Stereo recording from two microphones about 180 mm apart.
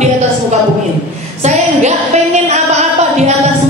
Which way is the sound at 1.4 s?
40° right (ahead or behind).